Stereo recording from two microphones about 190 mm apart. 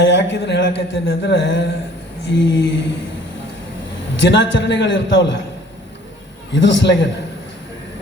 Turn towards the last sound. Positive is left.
turn(degrees=70)  # may be behind; listen again after turning